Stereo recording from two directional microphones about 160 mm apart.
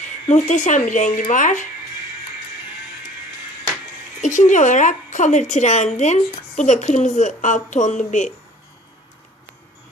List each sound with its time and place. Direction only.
0.3 s a woman's voice: 45° left (ahead or behind)
4.2 s a woman's voice: 50° left (ahead or behind)